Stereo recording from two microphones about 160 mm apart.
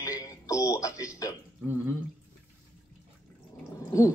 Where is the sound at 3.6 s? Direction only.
20° left (ahead or behind).